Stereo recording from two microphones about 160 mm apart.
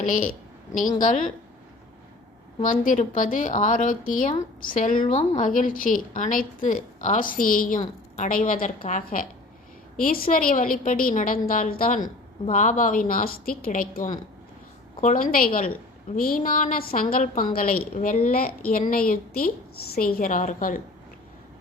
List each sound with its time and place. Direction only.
0.0 s a woman's voice: 55° left (ahead or behind)
2.8 s a woman's voice: 55° left (ahead or behind)